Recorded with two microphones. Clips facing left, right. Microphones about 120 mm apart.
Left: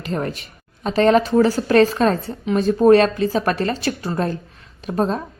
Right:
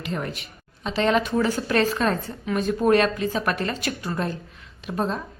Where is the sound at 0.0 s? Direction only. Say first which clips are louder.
Left 5 dB; 40° left (ahead or behind).